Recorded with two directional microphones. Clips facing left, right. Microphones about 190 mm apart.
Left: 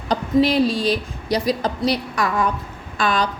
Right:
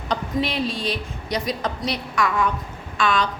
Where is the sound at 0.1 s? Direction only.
35° left (ahead or behind).